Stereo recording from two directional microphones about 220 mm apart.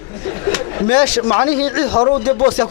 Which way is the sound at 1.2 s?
20° left (ahead or behind).